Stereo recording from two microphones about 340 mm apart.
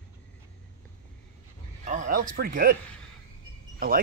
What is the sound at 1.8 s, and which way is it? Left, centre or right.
Speech, right.